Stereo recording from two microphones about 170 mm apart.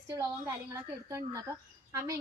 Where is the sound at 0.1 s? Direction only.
20° right (ahead or behind).